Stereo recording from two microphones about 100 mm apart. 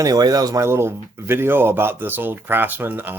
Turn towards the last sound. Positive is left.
turn(degrees=-20)  # may be behind; listen again after turning